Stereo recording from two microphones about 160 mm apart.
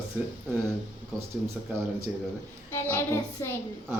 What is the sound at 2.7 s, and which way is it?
Speech, 15° left (ahead or behind).